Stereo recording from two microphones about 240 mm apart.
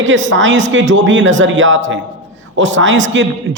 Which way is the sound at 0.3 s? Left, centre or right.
Right.